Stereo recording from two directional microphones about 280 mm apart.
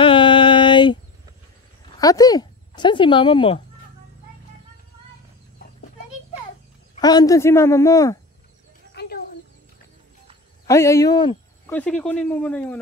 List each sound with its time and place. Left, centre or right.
0.0 s a sound: centre
2.0 s speech: centre
7.0 s speech: centre
9.0 s a sound: left
10.7 s speech: centre
11.8 s speech: centre